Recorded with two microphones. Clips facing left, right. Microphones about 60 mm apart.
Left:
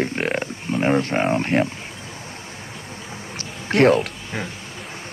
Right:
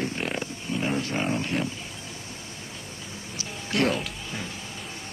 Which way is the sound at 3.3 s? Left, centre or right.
Left.